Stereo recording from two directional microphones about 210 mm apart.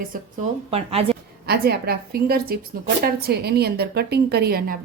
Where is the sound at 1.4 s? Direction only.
50° right (ahead or behind).